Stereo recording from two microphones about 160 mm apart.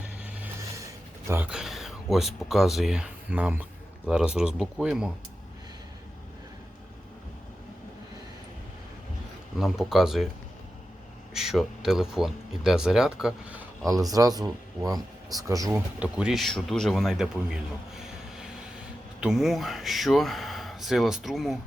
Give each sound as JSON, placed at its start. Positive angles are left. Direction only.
{"t": 0.0, "sound": "music", "side_deg": -10}
{"t": 1.3, "sound": "speech", "side_deg": -10}
{"t": 9.6, "sound": "speech", "side_deg": 0}
{"t": 11.3, "sound": "speech", "side_deg": -5}
{"t": 13.8, "sound": "speech", "side_deg": -20}
{"t": 16.0, "sound": "speech", "side_deg": -5}